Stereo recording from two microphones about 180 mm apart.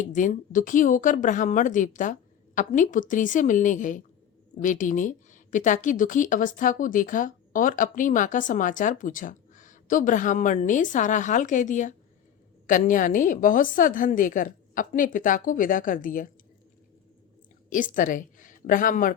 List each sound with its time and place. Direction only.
0.1 s a woman's voice: 45° left (ahead or behind)
17.7 s a woman's voice: 45° left (ahead or behind)